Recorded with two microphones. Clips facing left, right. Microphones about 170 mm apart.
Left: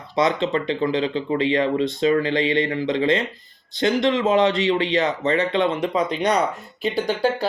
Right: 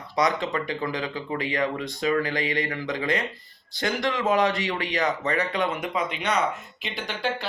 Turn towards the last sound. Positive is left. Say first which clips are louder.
# left 9 dB
turn(degrees=40)  # may be behind; listen again after turning